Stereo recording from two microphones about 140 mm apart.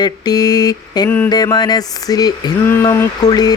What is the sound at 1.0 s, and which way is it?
Speech, 10° left (ahead or behind).